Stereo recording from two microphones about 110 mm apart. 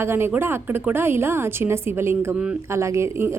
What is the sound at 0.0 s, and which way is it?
Speech, 20° right (ahead or behind).